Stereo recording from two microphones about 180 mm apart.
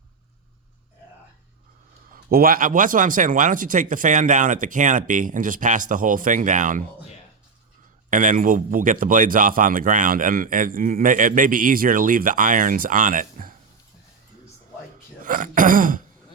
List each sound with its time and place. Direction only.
2.1 s speech: 55° right (ahead or behind)
8.1 s speech: 45° right (ahead or behind)
15.2 s speech: 45° right (ahead or behind)